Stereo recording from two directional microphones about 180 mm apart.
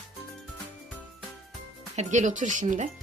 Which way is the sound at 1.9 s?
45° right (ahead or behind).